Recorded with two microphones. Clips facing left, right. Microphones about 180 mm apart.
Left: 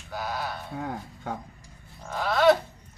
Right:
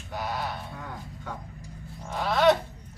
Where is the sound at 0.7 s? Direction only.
55° left (ahead or behind).